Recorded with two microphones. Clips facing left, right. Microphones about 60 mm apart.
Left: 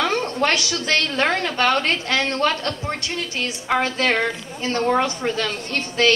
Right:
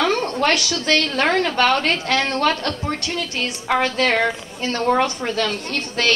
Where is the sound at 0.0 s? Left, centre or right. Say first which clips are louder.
Right 2 dB; right.